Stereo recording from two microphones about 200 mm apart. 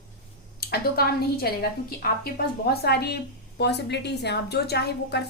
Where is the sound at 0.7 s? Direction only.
50° left (ahead or behind).